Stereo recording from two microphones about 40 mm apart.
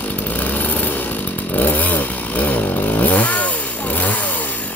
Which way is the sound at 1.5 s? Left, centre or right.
Left.